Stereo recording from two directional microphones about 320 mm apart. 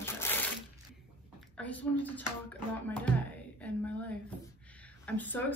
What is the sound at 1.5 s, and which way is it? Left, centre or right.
Speech, centre.